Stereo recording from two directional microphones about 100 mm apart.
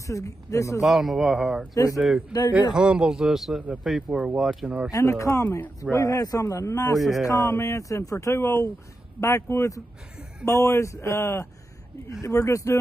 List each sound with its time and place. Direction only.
0.0 s a man's voice: 30° left (ahead or behind)
0.8 s a man's voice: centre (ahead or behind)
1.7 s a man's voice: 35° left (ahead or behind)
2.0 s a man's voice: centre (ahead or behind)
4.9 s a man's voice: 30° left (ahead or behind)
7.0 s a man's voice: centre (ahead or behind)
7.2 s a man's voice: 30° left (ahead or behind)